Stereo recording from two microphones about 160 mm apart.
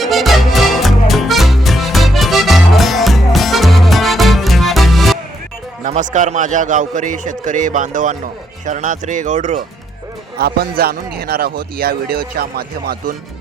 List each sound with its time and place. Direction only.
0.0 s music: centre (ahead or behind)
5.8 s a man's voice: 50° right (ahead or behind)
10.3 s a man's voice: 75° right (ahead or behind)